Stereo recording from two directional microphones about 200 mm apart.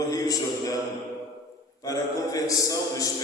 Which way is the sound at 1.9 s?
15° left (ahead or behind).